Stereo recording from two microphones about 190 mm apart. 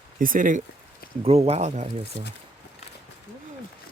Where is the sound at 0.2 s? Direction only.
45° right (ahead or behind).